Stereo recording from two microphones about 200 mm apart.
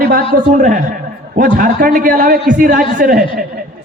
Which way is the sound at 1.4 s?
40° right (ahead or behind).